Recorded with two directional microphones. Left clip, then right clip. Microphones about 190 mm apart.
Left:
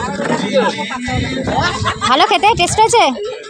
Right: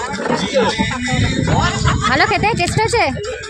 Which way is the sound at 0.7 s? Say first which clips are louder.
Right 1 dB; 55° right (ahead or behind).